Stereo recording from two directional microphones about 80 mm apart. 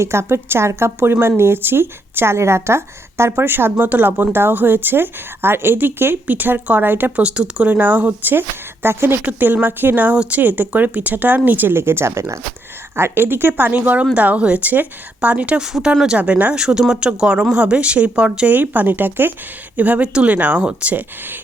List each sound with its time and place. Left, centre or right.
0.0 s speech: right